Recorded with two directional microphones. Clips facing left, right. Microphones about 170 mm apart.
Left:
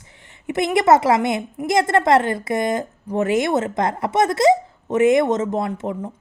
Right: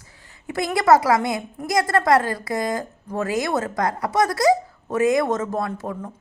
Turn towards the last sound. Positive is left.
turn(degrees=20)  # may be behind; listen again after turning